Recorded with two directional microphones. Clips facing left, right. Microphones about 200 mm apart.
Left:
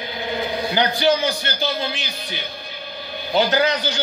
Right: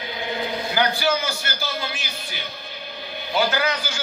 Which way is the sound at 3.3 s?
25° left (ahead or behind).